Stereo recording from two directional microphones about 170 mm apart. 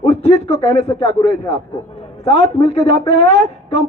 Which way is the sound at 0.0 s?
35° left (ahead or behind).